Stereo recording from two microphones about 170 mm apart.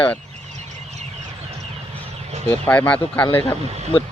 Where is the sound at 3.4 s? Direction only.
35° left (ahead or behind).